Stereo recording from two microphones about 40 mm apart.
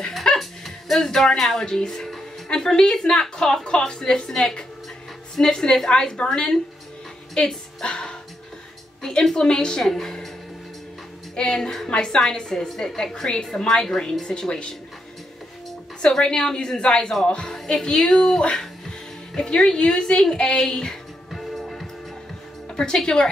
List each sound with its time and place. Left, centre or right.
0.1 s music: centre
2.5 s a woman's voice: centre
5.5 s a woman's voice: centre
7.3 s music: centre
9.0 s a woman's voice: centre
11.3 s a woman's voice: centre
16.2 s a woman's voice: centre
21.3 s music: centre
22.7 s music: centre